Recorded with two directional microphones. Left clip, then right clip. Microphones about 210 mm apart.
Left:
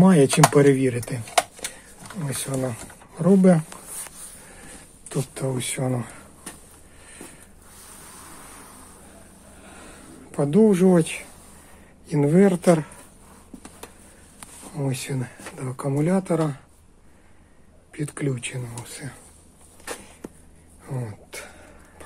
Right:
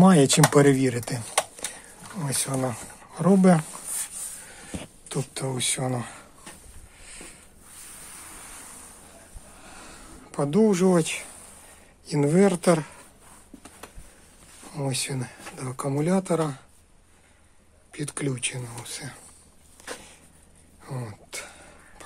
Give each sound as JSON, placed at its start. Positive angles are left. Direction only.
{"t": 0.0, "sound": "speech", "side_deg": -15}
{"t": 5.0, "sound": "speech", "side_deg": -10}
{"t": 7.8, "sound": "vehicle", "side_deg": -15}
{"t": 9.6, "sound": "a sound", "side_deg": 0}
{"t": 12.1, "sound": "speech", "side_deg": -10}
{"t": 14.7, "sound": "speech", "side_deg": -10}
{"t": 17.9, "sound": "speech", "side_deg": -15}
{"t": 20.8, "sound": "throat clearing", "side_deg": -5}